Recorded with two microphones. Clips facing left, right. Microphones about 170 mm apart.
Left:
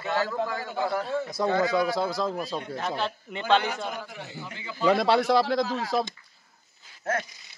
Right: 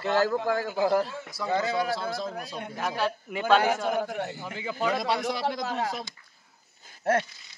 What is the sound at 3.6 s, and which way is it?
Speech, 50° right (ahead or behind).